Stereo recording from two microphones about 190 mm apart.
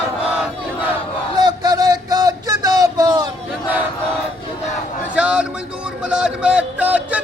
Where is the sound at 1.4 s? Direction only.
20° right (ahead or behind).